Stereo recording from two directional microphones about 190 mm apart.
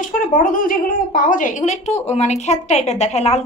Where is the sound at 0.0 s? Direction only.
45° left (ahead or behind).